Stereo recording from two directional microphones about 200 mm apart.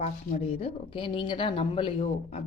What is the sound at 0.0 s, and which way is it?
Speech, 35° left (ahead or behind).